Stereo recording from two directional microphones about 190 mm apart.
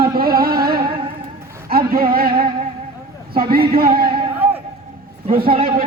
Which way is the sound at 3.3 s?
50° right (ahead or behind).